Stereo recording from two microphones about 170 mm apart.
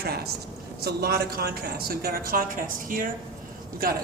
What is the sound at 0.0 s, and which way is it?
A woman's voice, 65° right (ahead or behind).